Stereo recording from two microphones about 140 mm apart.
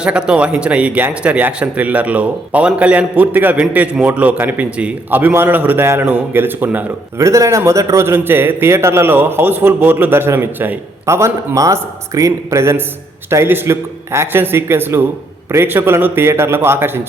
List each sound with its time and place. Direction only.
0.0 s speech: 5° right (ahead or behind)